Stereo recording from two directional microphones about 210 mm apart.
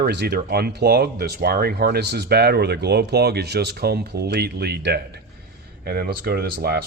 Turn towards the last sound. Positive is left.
turn(degrees=-45)  # may be behind; listen again after turning